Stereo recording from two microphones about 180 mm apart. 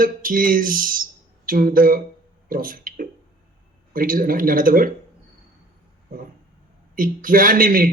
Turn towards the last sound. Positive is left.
turn(degrees=-50)  # may be behind; listen again after turning